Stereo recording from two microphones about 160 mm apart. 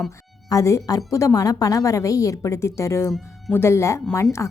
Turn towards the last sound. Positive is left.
turn(degrees=20)  # may be behind; listen again after turning